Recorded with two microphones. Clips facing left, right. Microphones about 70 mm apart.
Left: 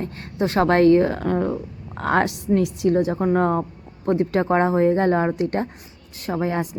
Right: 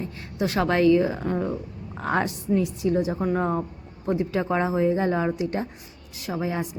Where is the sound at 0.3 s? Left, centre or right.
Left.